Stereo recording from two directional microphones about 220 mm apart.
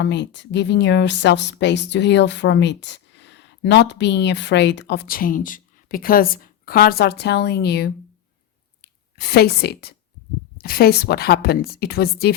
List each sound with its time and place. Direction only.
0.0 s a woman's voice: 50° left (ahead or behind)